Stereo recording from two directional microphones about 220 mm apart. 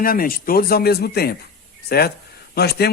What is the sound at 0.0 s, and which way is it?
Speech, 40° left (ahead or behind).